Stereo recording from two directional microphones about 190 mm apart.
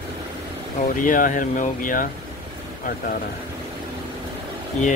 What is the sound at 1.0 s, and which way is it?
Speech, 45° left (ahead or behind).